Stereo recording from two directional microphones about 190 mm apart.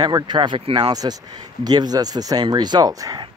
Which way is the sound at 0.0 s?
25° right (ahead or behind).